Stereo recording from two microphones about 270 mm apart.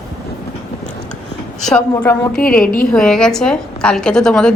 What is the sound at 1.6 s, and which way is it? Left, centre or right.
Speech, centre.